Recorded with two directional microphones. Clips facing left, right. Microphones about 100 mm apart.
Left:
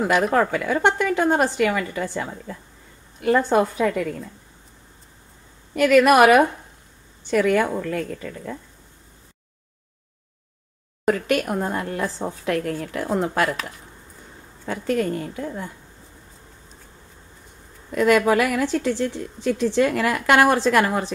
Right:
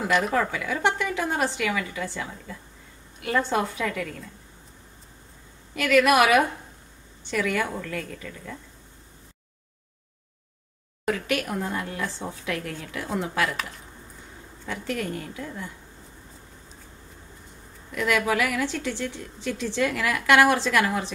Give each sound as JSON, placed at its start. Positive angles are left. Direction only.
{"t": 0.0, "sound": "a woman's voice", "side_deg": 45}
{"t": 5.8, "sound": "a woman's voice", "side_deg": 45}
{"t": 11.1, "sound": "a woman's voice", "side_deg": 45}
{"t": 14.7, "sound": "a woman's voice", "side_deg": 45}
{"t": 17.9, "sound": "a woman's voice", "side_deg": 45}